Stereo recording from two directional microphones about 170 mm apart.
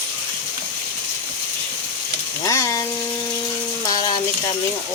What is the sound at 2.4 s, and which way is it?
Frying, 20° left (ahead or behind).